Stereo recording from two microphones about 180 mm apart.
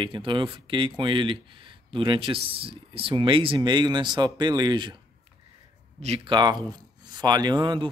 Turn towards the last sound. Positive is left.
turn(degrees=-25)  # may be behind; listen again after turning